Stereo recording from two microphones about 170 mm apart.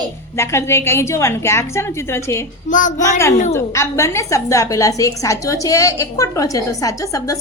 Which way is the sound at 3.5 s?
15° left (ahead or behind).